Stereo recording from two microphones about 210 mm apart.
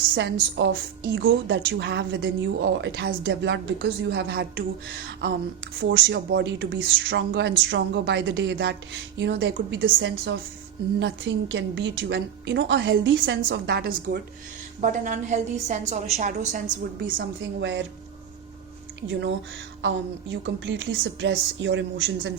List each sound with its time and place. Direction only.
0.1 s a woman's voice: 60° right (ahead or behind)
5.8 s a woman's voice: 60° right (ahead or behind); by 16.6 s 35° right (ahead or behind)
17.6 s a woman's voice: 55° right (ahead or behind)
19.0 s a woman's voice: 60° right (ahead or behind)